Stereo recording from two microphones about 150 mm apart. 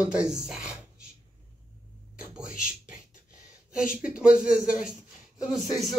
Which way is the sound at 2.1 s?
5° right (ahead or behind).